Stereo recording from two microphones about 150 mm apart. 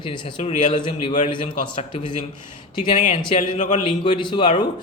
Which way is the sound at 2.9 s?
55° left (ahead or behind).